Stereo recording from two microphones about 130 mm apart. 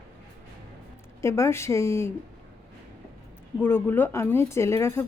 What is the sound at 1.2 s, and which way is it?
Speech, 20° left (ahead or behind).